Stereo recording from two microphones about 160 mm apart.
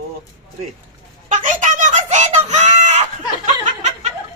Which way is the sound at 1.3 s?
50° right (ahead or behind).